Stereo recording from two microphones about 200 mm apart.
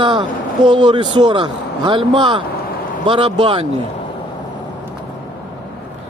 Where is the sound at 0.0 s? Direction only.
25° right (ahead or behind).